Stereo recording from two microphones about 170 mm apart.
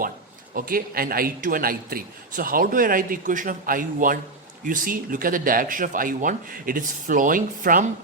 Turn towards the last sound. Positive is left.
turn(degrees=-50)  # may be behind; listen again after turning